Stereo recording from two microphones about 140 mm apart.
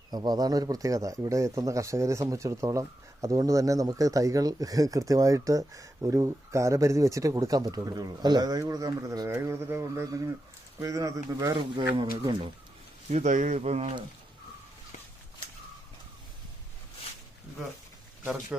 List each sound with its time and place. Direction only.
0.1 s speech: 30° right (ahead or behind)
13.1 s speech: 55° right (ahead or behind)